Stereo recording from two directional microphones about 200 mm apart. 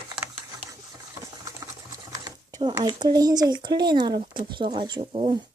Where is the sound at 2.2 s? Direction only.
20° right (ahead or behind).